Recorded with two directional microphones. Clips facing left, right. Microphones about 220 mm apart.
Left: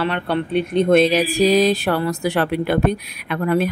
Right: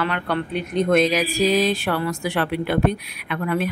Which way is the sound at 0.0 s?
30° left (ahead or behind).